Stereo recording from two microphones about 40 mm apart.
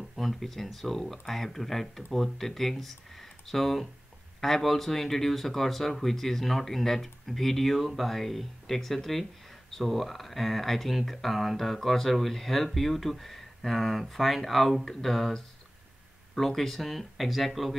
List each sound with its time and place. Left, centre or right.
0.1 s speech: centre